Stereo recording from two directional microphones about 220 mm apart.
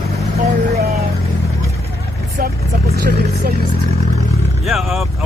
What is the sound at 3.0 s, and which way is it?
Speech, 45° right (ahead or behind).